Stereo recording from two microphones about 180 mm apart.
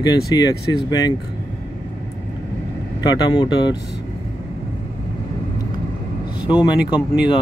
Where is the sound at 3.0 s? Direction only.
20° left (ahead or behind).